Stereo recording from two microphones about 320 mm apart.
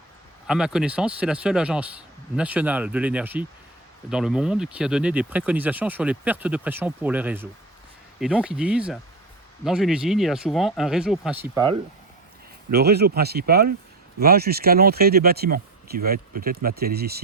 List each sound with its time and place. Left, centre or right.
0.4 s speech: centre
12.7 s speech: right